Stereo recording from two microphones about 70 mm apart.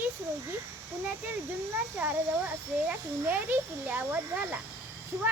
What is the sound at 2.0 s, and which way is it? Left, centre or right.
A woman's voice, right.